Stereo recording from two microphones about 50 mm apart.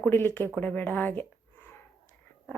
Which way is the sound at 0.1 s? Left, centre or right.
Left.